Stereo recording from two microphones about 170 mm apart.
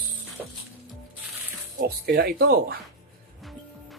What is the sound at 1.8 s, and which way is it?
Speech, 65° right (ahead or behind).